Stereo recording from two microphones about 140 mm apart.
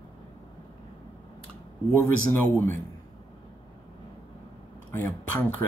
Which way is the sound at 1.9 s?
15° left (ahead or behind).